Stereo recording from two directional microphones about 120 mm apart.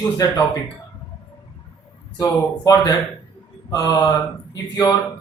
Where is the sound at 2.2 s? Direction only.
30° left (ahead or behind).